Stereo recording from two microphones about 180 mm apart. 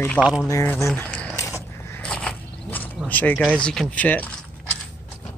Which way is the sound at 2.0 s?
5° left (ahead or behind).